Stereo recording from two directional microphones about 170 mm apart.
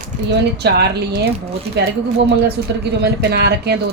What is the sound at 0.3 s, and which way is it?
Speech, 75° right (ahead or behind).